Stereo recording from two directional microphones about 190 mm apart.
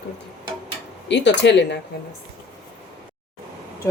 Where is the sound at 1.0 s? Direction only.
65° left (ahead or behind).